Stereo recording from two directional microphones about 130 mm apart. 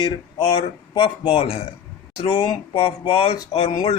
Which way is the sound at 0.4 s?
40° left (ahead or behind).